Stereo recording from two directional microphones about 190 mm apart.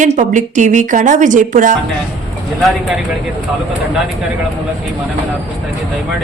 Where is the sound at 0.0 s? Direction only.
40° right (ahead or behind).